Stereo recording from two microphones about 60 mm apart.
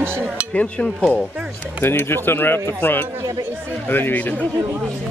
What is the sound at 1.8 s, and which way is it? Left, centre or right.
Speech, left.